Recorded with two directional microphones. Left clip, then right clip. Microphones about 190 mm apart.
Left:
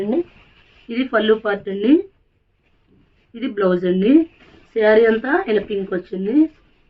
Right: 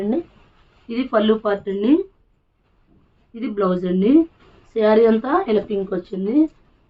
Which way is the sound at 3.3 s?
15° right (ahead or behind).